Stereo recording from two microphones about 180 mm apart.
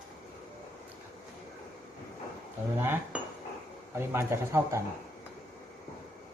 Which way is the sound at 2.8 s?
10° right (ahead or behind).